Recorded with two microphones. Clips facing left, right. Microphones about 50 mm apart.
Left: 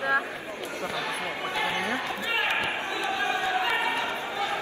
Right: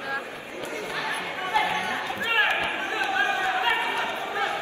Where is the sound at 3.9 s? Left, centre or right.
Right.